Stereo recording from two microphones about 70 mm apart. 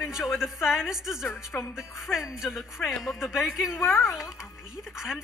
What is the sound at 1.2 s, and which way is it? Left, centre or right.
Speech, left.